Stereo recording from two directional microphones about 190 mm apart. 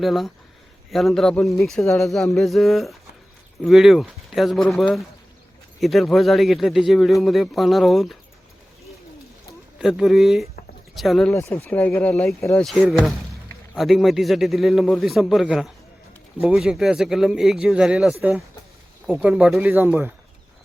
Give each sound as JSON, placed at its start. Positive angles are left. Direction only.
{"t": 0.0, "sound": "a man's voice", "side_deg": 0}
{"t": 9.7, "sound": "a man's voice", "side_deg": 0}
{"t": 11.3, "sound": "speech", "side_deg": 10}
{"t": 12.4, "sound": "speech", "side_deg": 15}
{"t": 12.6, "sound": "a man's voice", "side_deg": 0}